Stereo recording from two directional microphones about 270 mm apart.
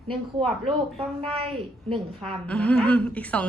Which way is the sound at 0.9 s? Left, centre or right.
Right.